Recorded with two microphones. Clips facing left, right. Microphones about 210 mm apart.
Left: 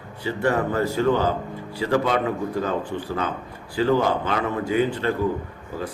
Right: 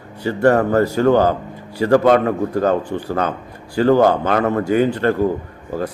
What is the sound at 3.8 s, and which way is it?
A man's voice, 50° right (ahead or behind).